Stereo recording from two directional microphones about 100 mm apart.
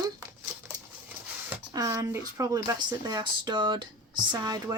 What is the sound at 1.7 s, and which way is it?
Speech, 35° right (ahead or behind).